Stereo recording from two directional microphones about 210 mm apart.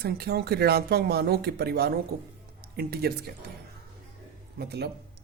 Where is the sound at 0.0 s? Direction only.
50° right (ahead or behind).